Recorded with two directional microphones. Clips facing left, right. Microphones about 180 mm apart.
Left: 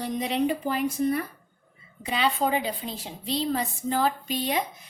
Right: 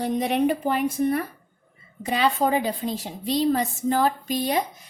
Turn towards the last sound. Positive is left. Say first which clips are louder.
# right 4 dB
turn(degrees=-45)  # may be behind; listen again after turning